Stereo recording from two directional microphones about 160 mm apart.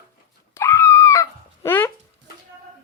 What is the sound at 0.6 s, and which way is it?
Screaming, 15° left (ahead or behind).